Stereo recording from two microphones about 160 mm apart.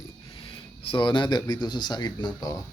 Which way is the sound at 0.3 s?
35° left (ahead or behind).